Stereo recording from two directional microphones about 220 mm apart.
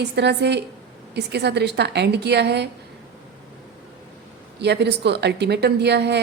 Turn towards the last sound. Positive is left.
turn(degrees=-50)  # may be behind; listen again after turning